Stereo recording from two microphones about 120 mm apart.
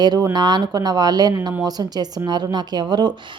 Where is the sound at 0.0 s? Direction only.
35° right (ahead or behind).